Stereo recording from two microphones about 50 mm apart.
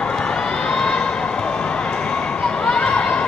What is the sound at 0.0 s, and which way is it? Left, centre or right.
Crowd, centre.